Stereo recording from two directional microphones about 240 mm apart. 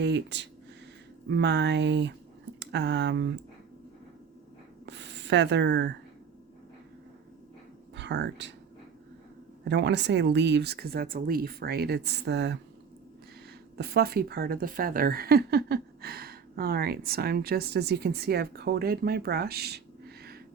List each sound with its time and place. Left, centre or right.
0.0 s speech: right
4.9 s a sound: right
7.9 s speech: right
9.6 s speech: right
13.7 s a woman's voice: right